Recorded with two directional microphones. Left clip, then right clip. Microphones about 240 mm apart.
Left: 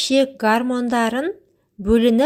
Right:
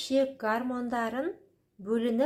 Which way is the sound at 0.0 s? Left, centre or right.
Left.